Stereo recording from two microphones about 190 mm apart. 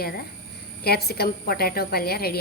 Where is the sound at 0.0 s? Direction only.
55° left (ahead or behind).